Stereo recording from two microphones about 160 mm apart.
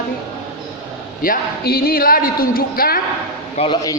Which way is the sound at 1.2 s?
65° left (ahead or behind).